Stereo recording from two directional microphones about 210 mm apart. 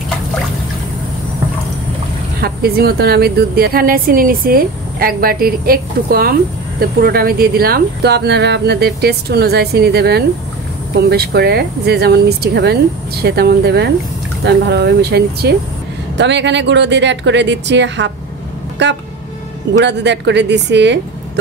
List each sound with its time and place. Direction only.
2.4 s a woman's voice: 45° right (ahead or behind)